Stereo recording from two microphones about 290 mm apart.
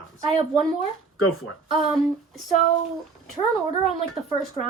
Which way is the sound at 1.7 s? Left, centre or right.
Centre.